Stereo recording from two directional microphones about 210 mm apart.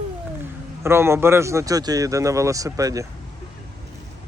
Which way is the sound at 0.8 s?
10° right (ahead or behind).